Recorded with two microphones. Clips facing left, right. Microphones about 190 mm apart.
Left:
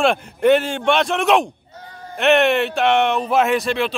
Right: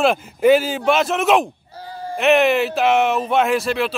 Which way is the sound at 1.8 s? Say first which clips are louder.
Right 8 dB; 30° right (ahead or behind).